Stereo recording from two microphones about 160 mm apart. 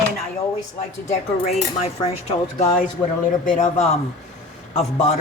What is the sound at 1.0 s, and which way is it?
Speech, 40° left (ahead or behind).